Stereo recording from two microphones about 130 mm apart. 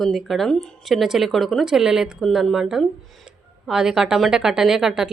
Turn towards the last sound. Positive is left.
turn(degrees=-5)  # may be behind; listen again after turning